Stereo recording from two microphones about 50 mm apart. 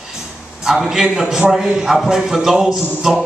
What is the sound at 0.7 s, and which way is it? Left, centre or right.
A man's voice, centre.